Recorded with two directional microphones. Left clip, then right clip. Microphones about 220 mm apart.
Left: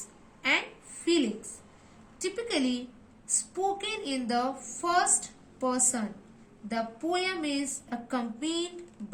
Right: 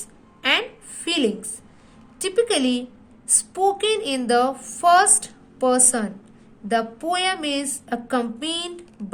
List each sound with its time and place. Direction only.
1.0 s a woman's voice: 45° right (ahead or behind)